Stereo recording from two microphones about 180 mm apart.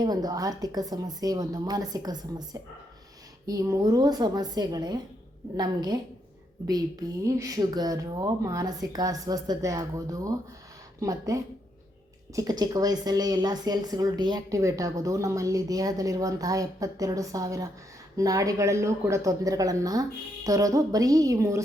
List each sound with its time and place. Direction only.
0.0 s speech: 20° right (ahead or behind)